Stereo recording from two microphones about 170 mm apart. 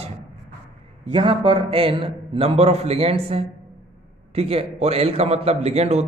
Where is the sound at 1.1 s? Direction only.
30° right (ahead or behind).